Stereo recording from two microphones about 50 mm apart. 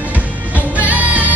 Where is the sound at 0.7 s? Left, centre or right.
Right.